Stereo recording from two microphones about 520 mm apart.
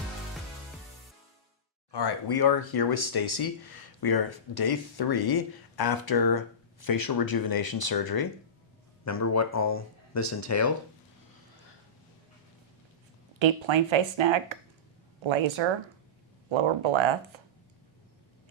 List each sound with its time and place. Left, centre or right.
1.9 s speech: left
9.0 s speech: left
13.4 s speech: right